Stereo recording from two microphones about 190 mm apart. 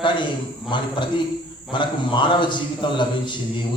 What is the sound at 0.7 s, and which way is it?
A man's voice, 25° left (ahead or behind).